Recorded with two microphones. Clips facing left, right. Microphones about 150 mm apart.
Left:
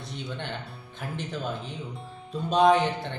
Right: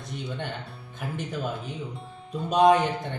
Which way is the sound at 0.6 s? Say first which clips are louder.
Right 1 dB; centre (ahead or behind).